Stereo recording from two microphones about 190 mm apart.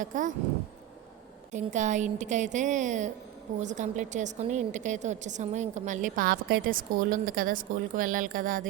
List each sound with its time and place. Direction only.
0.0 s speech: 40° right (ahead or behind)
1.5 s a woman's voice: 40° right (ahead or behind)